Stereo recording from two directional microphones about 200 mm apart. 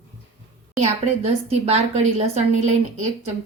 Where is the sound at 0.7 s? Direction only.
35° right (ahead or behind).